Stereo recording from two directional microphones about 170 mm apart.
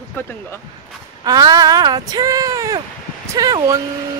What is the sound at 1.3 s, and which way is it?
Speech, 20° right (ahead or behind).